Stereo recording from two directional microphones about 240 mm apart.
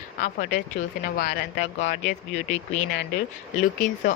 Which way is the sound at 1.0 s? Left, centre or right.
Left.